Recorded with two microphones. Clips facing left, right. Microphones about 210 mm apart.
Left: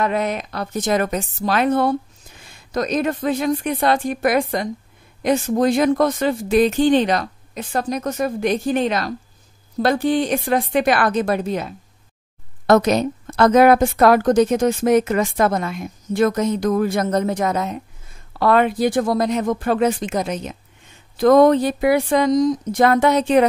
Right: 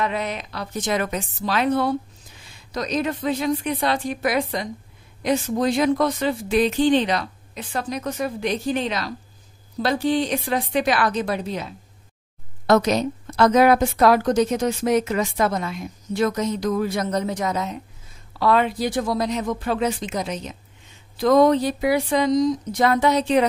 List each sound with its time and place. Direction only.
0.0 s a woman's voice: 50° left (ahead or behind)